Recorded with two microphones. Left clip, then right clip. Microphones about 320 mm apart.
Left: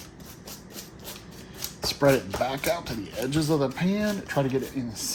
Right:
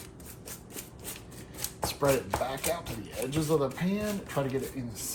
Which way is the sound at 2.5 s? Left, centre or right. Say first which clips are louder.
Left 5 dB; left.